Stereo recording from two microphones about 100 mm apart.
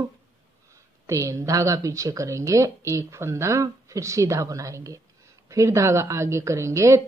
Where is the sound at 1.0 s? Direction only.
30° right (ahead or behind).